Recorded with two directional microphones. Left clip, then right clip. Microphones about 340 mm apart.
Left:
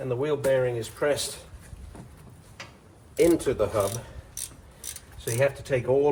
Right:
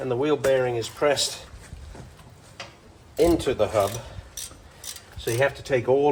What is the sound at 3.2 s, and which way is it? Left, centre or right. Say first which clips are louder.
Speech: right 1 dB; centre.